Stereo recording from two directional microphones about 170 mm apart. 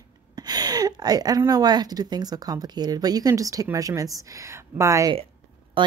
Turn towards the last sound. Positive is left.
turn(degrees=-30)  # may be behind; listen again after turning